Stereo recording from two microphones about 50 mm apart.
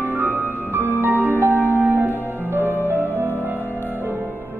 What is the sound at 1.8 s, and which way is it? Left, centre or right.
Music, right.